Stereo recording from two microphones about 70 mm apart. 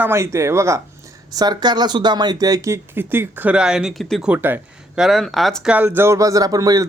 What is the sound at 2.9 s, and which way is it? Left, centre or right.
Speech, right.